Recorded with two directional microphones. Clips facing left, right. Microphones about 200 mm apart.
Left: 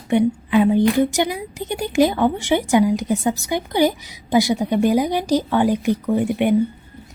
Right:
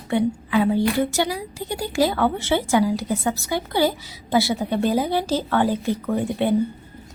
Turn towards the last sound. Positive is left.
turn(degrees=15)  # may be behind; listen again after turning